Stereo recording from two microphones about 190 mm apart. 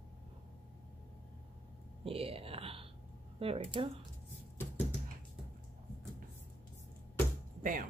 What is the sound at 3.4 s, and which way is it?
Speech, 30° right (ahead or behind).